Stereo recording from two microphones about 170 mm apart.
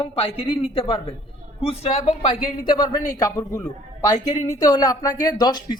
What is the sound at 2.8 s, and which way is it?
A man's voice, 25° left (ahead or behind).